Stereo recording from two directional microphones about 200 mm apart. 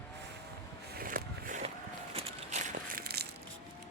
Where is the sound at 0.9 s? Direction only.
45° right (ahead or behind).